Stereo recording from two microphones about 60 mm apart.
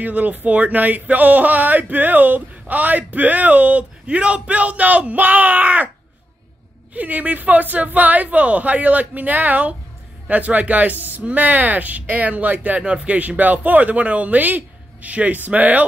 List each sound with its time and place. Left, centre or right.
0.0 s speech: right
6.9 s speech: right